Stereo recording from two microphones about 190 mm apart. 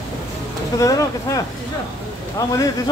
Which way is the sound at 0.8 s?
20° left (ahead or behind).